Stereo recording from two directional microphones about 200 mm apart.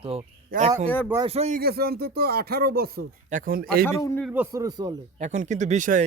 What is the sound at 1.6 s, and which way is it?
Speech, 50° right (ahead or behind).